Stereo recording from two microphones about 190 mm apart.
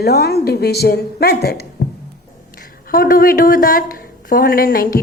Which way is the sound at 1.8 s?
55° left (ahead or behind).